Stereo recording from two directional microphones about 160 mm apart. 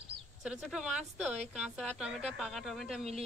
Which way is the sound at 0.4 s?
5° right (ahead or behind).